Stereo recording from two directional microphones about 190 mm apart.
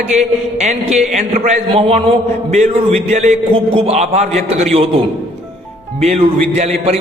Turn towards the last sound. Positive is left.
turn(degrees=-35)  # may be behind; listen again after turning